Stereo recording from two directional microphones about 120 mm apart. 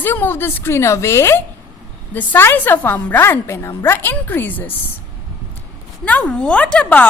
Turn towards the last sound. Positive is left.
turn(degrees=10)  # may be behind; listen again after turning